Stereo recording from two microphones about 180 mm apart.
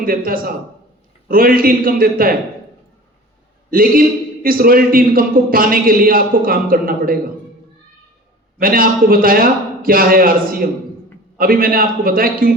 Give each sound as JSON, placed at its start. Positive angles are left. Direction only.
{"t": 0.0, "sound": "a man's voice", "side_deg": -55}
{"t": 3.7, "sound": "a man's voice", "side_deg": -50}
{"t": 8.5, "sound": "a man's voice", "side_deg": -55}